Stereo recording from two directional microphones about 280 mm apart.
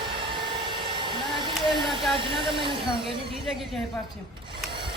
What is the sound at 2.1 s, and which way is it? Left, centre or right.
Speech, centre.